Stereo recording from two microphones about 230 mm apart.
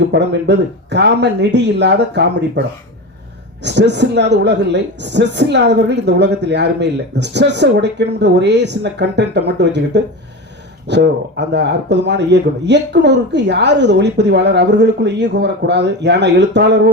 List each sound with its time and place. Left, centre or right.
0.1 s a woman's voice: right
3.6 s a woman's voice: right